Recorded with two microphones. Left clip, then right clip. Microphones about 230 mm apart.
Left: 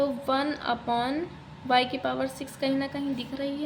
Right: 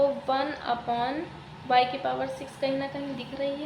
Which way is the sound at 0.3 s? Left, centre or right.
Left.